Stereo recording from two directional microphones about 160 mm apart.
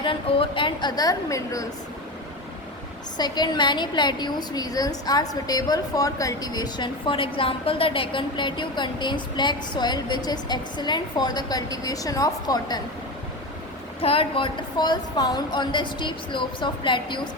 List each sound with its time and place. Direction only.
0.0 s a woman's voice: 30° left (ahead or behind)
3.2 s a woman's voice: 25° left (ahead or behind)
14.0 s a woman's voice: 35° left (ahead or behind)